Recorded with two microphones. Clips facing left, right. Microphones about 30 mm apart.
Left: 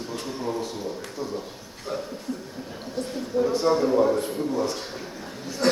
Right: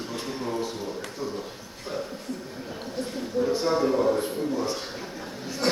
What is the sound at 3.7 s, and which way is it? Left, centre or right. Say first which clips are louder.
Speech: left 2 dB; centre.